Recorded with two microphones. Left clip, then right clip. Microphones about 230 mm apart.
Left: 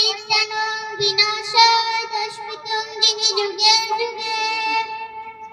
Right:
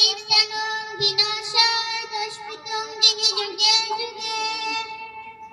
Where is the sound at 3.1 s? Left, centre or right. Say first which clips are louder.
Left 2 dB; centre.